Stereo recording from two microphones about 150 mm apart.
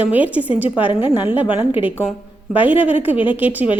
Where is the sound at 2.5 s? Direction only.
10° right (ahead or behind).